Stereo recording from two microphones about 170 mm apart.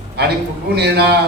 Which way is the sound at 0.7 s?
70° right (ahead or behind).